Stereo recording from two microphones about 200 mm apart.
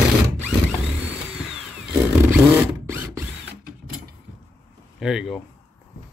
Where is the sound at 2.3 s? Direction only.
10° right (ahead or behind).